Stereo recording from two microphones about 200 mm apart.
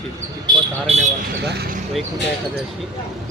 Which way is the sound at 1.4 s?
55° right (ahead or behind).